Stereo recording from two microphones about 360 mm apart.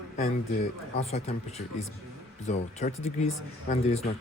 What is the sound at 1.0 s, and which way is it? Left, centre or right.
Speech, centre.